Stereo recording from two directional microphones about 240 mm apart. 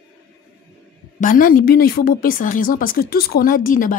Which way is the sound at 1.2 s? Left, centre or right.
Left.